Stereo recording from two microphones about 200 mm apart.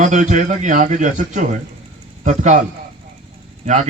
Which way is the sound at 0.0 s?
35° right (ahead or behind).